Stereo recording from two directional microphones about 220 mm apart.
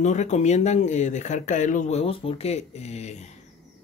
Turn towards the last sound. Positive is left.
turn(degrees=30)  # may be behind; listen again after turning